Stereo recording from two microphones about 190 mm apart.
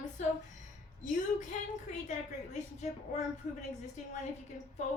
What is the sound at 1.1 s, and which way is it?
A woman's voice, 40° left (ahead or behind).